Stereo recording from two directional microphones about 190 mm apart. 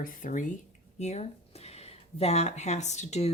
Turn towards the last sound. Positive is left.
turn(degrees=35)  # may be behind; listen again after turning